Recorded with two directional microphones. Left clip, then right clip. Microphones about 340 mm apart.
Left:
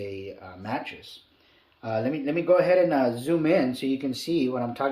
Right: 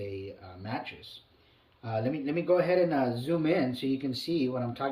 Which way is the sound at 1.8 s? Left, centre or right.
Centre.